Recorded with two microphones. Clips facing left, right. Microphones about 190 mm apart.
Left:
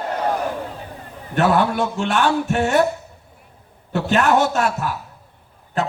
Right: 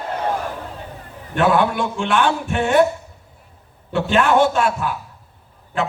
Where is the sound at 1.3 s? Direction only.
40° left (ahead or behind).